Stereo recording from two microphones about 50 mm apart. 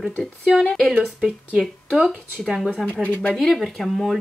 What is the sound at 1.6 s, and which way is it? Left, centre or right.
Speech, centre.